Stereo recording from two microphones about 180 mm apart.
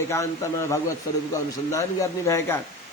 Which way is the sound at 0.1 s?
15° left (ahead or behind).